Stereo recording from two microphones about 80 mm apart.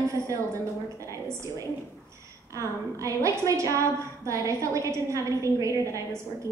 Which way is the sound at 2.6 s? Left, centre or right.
Right.